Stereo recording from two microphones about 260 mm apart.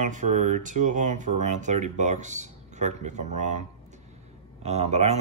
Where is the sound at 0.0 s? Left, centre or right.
Right.